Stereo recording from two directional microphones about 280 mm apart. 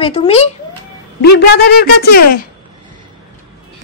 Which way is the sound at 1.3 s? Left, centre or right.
Left.